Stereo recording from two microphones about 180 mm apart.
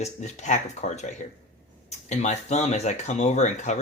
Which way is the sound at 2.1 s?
40° left (ahead or behind).